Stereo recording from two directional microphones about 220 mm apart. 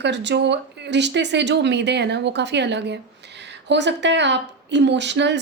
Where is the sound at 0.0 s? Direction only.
50° right (ahead or behind).